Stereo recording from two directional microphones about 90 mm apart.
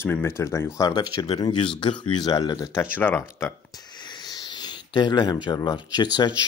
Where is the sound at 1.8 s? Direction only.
60° left (ahead or behind).